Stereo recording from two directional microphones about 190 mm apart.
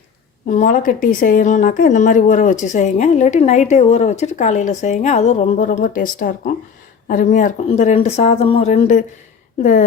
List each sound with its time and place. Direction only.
0.4 s a woman's voice: 45° left (ahead or behind)